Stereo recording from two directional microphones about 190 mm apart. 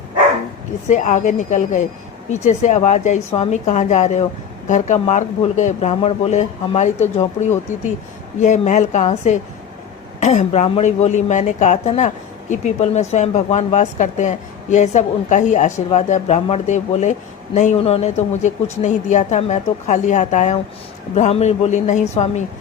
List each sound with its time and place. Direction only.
0.9 s a woman's voice: 40° left (ahead or behind)